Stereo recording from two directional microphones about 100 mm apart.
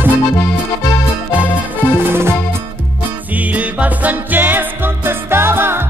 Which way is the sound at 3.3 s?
15° right (ahead or behind).